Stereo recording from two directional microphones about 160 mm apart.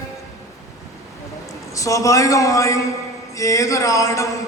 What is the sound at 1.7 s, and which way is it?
A man's voice, 20° left (ahead or behind).